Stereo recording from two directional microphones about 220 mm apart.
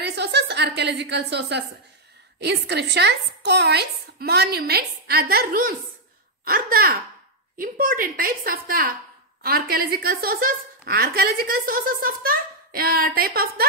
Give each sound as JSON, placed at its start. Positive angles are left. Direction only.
{"t": 0.0, "sound": "a woman's voice", "side_deg": -50}